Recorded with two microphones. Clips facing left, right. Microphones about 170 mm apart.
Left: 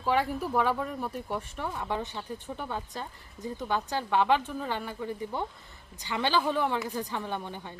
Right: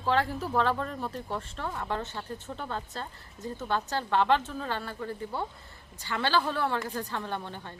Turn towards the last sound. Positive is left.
turn(degrees=15)  # may be behind; listen again after turning